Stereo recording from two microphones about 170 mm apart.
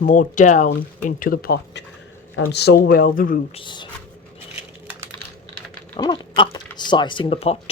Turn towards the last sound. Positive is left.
turn(degrees=35)  # may be behind; listen again after turning